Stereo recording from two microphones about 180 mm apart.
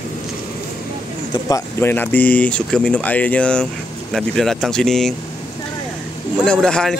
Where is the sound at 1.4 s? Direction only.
15° left (ahead or behind).